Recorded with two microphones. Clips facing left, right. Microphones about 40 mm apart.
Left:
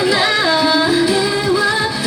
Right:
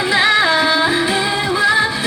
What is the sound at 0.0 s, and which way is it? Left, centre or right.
Music, centre.